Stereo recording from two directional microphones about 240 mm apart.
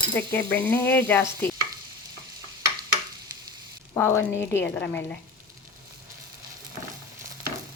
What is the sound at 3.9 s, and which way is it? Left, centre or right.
A woman's voice, centre.